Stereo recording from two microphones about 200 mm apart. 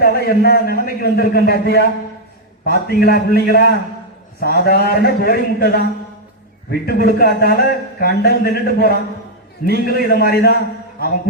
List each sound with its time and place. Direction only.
0.0 s a man's voice: 50° left (ahead or behind)